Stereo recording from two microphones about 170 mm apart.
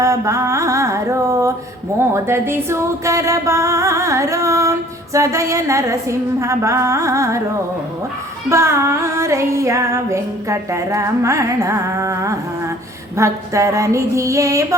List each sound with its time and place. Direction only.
0.0 s music: 20° right (ahead or behind)
2.0 s speech: 15° right (ahead or behind)
8.4 s speech: 15° right (ahead or behind)